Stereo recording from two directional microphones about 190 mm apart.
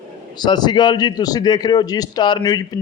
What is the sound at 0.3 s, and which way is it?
A man's voice, 20° left (ahead or behind).